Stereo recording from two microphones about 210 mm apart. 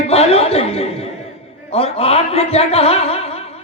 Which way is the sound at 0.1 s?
30° left (ahead or behind).